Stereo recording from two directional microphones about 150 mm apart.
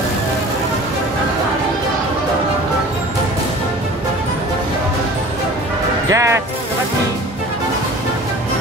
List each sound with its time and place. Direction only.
6.0 s speech: 20° right (ahead or behind)